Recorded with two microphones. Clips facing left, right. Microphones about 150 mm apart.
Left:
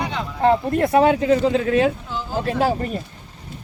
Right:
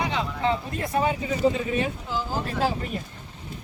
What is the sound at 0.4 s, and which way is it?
Speech, 55° left (ahead or behind).